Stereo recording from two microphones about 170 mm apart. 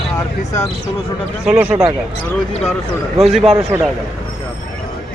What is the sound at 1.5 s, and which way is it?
Speech, 10° right (ahead or behind).